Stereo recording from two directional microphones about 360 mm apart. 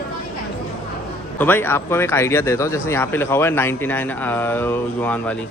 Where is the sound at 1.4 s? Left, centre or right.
Centre.